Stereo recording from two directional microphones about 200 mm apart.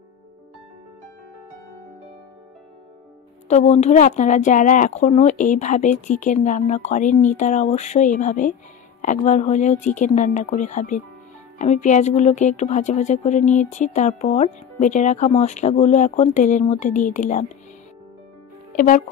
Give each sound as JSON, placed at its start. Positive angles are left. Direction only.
{"t": 3.4, "sound": "speech", "side_deg": 35}
{"t": 18.8, "sound": "speech", "side_deg": 40}